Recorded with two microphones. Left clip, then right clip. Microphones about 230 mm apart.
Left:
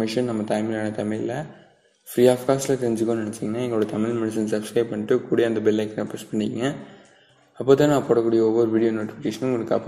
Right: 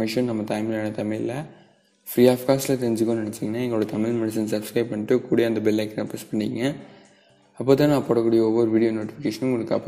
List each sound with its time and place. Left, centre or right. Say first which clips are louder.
0.0 s speech: even; right